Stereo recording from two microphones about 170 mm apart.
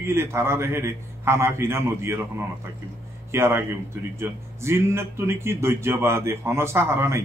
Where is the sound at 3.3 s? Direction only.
15° right (ahead or behind).